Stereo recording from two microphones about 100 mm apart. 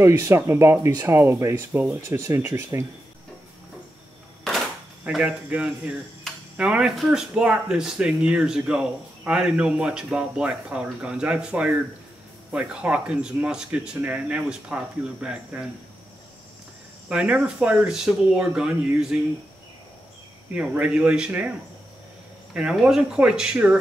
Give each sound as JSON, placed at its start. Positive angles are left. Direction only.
{"t": 0.0, "sound": "speech", "side_deg": -30}
{"t": 5.0, "sound": "speech", "side_deg": -10}
{"t": 7.0, "sound": "speech", "side_deg": 0}
{"t": 17.1, "sound": "speech", "side_deg": -10}
{"t": 20.5, "sound": "speech", "side_deg": -10}